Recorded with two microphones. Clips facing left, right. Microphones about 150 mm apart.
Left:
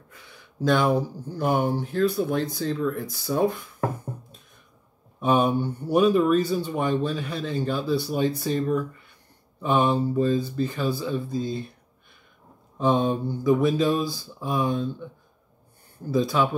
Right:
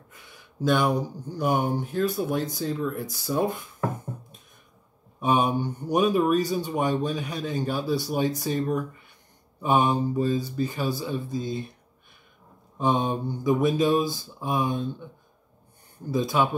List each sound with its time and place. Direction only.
0.7 s speech: 15° right (ahead or behind)
5.2 s speech: 15° right (ahead or behind)
9.6 s speech: 15° right (ahead or behind)
12.7 s mantra: 15° right (ahead or behind)
16.1 s speech: 20° right (ahead or behind)